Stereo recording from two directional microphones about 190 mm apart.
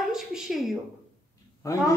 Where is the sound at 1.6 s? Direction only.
15° left (ahead or behind).